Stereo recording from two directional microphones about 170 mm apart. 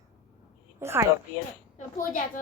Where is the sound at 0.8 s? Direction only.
15° right (ahead or behind).